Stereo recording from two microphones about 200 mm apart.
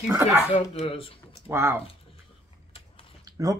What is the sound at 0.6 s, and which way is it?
Speech, 30° left (ahead or behind).